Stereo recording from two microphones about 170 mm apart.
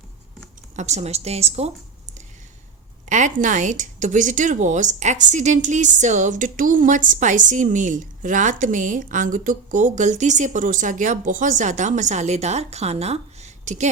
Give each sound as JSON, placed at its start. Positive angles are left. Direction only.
{"t": 0.8, "sound": "a woman's voice", "side_deg": -40}
{"t": 3.1, "sound": "speech", "side_deg": -45}